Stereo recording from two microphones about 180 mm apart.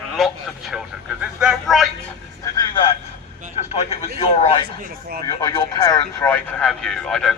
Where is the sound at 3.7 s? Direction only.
35° left (ahead or behind).